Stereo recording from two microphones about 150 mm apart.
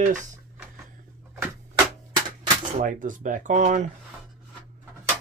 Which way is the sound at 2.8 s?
60° right (ahead or behind).